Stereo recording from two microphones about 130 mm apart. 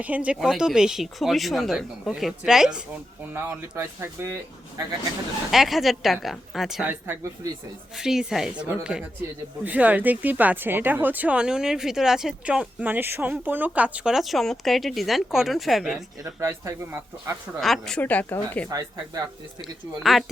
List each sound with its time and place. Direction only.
0.0 s speech: 10° right (ahead or behind)
3.3 s speech: 20° right (ahead or behind)
5.5 s speech: centre (ahead or behind)
7.9 s speech: 5° right (ahead or behind)
16.2 s speech: 20° right (ahead or behind)
17.6 s a woman's voice: 5° left (ahead or behind)
18.7 s speech: 30° right (ahead or behind)
20.0 s speech: centre (ahead or behind)